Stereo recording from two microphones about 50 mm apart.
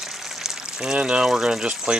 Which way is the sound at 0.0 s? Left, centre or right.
Centre.